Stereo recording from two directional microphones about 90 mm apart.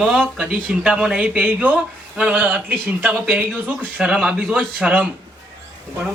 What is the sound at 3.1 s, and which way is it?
Speech, 5° right (ahead or behind).